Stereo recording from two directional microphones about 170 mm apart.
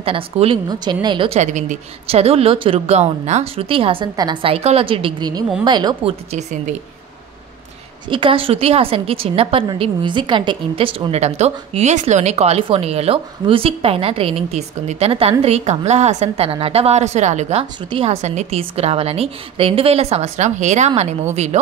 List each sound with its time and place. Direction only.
0.0 s a woman's voice: 35° right (ahead or behind)
8.1 s a woman's voice: 30° right (ahead or behind)